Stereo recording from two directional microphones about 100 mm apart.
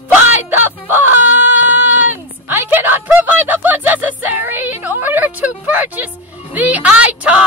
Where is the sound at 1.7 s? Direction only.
20° right (ahead or behind).